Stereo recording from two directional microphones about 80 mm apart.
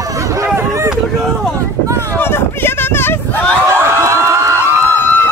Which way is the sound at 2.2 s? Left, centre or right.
Left.